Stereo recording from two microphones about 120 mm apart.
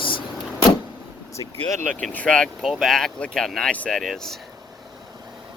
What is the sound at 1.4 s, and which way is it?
Speech, 25° left (ahead or behind).